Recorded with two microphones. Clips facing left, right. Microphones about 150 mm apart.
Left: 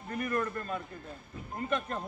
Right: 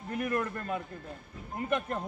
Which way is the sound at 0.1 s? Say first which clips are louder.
Right 1 dB; 5° right (ahead or behind).